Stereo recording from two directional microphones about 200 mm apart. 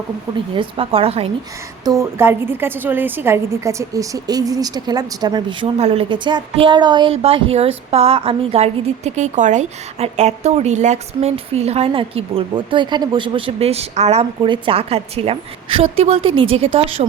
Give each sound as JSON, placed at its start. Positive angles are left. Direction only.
{"t": 0.5, "sound": "a woman's voice", "side_deg": -25}
{"t": 1.8, "sound": "a woman's voice", "side_deg": -15}